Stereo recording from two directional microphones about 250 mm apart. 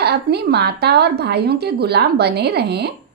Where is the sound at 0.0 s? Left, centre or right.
Right.